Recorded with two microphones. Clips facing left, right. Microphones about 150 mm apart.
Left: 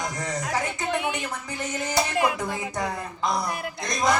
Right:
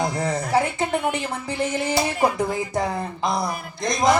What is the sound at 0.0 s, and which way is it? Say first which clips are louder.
Speech: right 6 dB; 30° right (ahead or behind).